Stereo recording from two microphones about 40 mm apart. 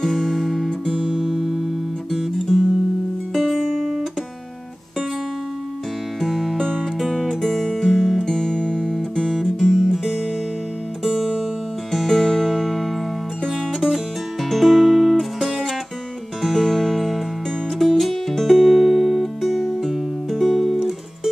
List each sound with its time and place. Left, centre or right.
0.1 s music: centre
0.7 s music: left
1.0 s music: centre
1.3 s music: centre
3.3 s music: centre
6.2 s music: centre
8.2 s music: centre
9.3 s music: centre
13.7 s music: centre